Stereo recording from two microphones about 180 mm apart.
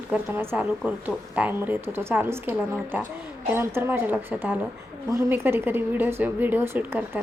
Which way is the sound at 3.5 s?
15° right (ahead or behind).